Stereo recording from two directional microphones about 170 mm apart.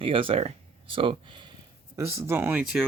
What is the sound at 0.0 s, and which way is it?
Speech, 30° right (ahead or behind).